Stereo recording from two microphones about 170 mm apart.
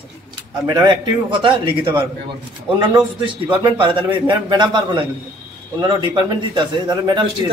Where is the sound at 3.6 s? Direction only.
25° right (ahead or behind).